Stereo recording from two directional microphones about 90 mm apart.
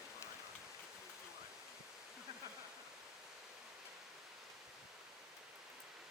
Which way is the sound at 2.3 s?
50° right (ahead or behind).